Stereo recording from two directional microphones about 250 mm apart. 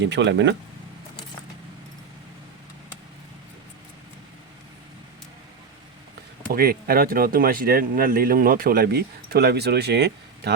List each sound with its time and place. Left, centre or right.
0.0 s speech: right
6.5 s speech: right